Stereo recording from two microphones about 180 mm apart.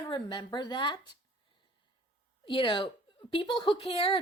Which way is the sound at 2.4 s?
30° left (ahead or behind).